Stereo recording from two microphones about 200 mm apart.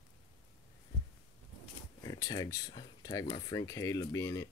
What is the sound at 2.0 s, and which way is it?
Speech, 15° left (ahead or behind).